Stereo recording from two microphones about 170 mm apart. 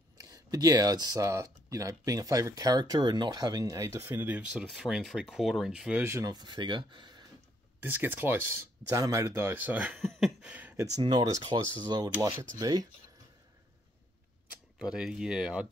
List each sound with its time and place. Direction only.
0.2 s speech: 20° right (ahead or behind)
7.8 s speech: 10° right (ahead or behind)
14.8 s speech: 5° right (ahead or behind)